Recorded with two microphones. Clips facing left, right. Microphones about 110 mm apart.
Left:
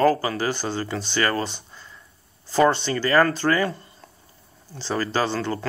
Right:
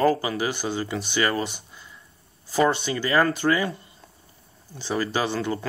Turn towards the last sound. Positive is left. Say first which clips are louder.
# left 1 dB
turn(degrees=-15)  # may be behind; listen again after turning